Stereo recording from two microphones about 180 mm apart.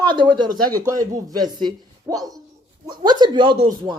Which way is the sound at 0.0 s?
25° right (ahead or behind).